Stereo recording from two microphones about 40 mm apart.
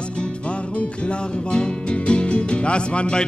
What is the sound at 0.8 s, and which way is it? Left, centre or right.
Music, left.